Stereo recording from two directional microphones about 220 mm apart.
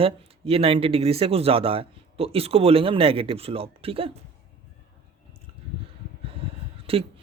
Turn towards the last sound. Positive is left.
turn(degrees=-25)  # may be behind; listen again after turning